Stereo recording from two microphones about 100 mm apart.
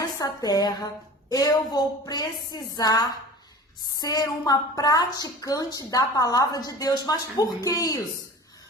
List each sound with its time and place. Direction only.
0.0 s a woman's voice: 40° left (ahead or behind)